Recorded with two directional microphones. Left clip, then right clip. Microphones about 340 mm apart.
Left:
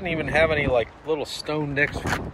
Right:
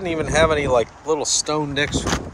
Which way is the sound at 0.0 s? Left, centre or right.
Centre.